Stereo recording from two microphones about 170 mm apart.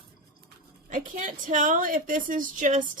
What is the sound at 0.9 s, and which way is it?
A woman's voice, 50° right (ahead or behind).